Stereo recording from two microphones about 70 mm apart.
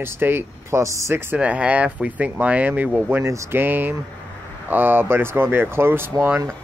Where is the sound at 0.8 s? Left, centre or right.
Right.